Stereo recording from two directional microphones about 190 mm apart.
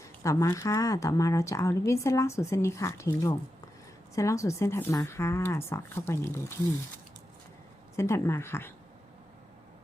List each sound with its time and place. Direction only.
0.0 s speech: 15° left (ahead or behind)
7.9 s speech: 15° left (ahead or behind)